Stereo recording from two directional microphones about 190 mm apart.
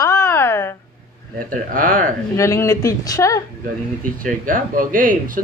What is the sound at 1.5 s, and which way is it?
Speech, 45° right (ahead or behind).